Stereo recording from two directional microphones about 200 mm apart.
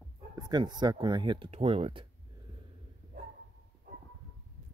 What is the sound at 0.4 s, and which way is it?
Speech, 20° right (ahead or behind).